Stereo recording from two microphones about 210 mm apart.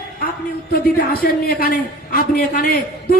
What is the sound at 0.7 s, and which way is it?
A man's voice, 45° left (ahead or behind).